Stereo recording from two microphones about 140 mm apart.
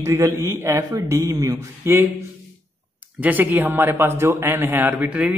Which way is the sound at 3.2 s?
10° right (ahead or behind).